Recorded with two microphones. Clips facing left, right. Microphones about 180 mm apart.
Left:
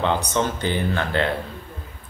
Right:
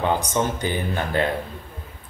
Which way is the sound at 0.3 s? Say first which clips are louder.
Even; 10° right (ahead or behind).